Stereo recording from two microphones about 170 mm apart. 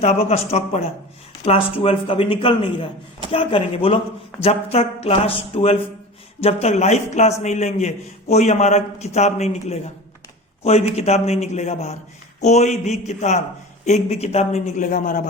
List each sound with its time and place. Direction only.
0.0 s a man's voice: 40° left (ahead or behind)